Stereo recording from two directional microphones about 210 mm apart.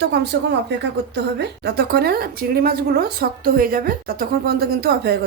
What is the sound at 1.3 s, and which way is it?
Speech, 50° right (ahead or behind).